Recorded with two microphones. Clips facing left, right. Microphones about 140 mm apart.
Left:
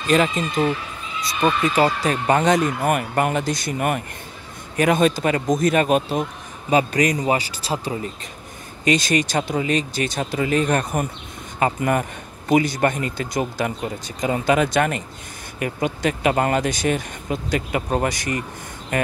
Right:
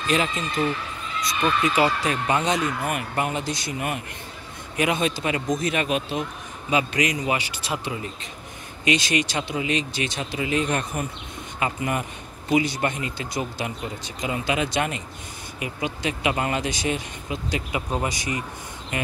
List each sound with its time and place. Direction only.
0.1 s a man's voice: 40° left (ahead or behind)